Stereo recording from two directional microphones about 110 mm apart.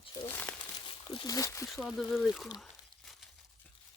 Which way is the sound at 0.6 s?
45° left (ahead or behind).